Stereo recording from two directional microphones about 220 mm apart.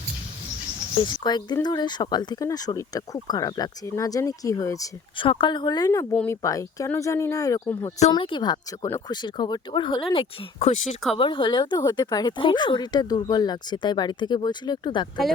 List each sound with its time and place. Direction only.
1.0 s speech: 20° left (ahead or behind)
15.2 s speech: centre (ahead or behind)